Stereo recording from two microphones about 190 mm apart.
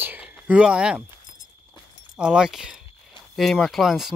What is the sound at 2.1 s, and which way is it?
Speech, 5° right (ahead or behind).